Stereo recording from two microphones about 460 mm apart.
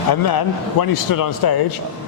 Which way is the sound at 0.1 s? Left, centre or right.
Left.